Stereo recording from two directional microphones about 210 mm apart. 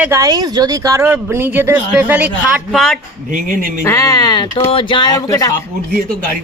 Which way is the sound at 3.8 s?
15° left (ahead or behind).